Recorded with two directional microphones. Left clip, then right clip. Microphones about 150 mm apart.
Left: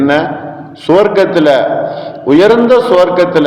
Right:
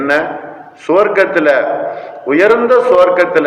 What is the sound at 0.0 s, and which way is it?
A man's voice, 40° left (ahead or behind).